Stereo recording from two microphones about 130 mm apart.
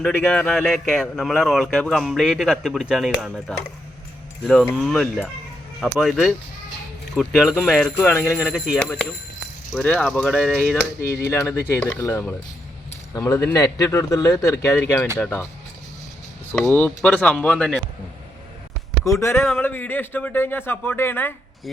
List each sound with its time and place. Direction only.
0.0 s speech: 10° left (ahead or behind)
4.4 s speech: 5° left (ahead or behind)
7.9 s speech: 15° left (ahead or behind)
16.5 s speech: 10° left (ahead or behind)
19.0 s speech: 20° left (ahead or behind)